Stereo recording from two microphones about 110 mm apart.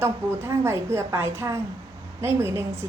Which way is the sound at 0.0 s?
25° right (ahead or behind).